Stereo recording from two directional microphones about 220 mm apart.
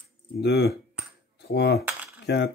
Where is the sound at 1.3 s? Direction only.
50° left (ahead or behind).